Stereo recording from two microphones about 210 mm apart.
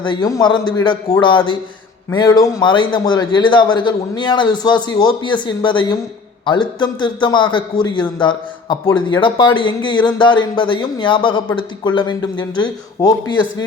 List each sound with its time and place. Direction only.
0.0 s a man's voice: 20° left (ahead or behind)